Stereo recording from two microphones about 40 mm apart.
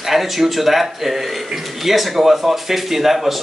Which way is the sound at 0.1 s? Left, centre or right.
Centre.